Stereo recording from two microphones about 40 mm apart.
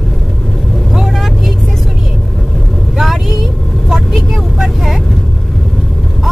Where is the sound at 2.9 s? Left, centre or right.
Centre.